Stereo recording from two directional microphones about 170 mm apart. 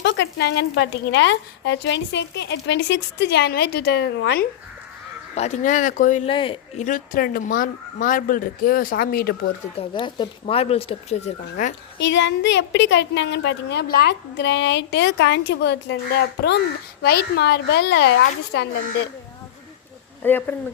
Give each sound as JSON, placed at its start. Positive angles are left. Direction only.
{"t": 0.0, "sound": "a woman's voice", "side_deg": 90}
{"t": 5.3, "sound": "speech", "side_deg": 40}
{"t": 6.2, "sound": "speech", "side_deg": 30}
{"t": 6.7, "sound": "speech", "side_deg": 50}
{"t": 9.7, "sound": "speech", "side_deg": 30}
{"t": 11.6, "sound": "speech", "side_deg": 45}
{"t": 11.9, "sound": "a woman's voice", "side_deg": 90}
{"t": 20.2, "sound": "speech", "side_deg": 10}